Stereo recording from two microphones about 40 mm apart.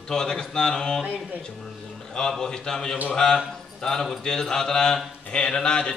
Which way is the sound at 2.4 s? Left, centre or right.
Centre.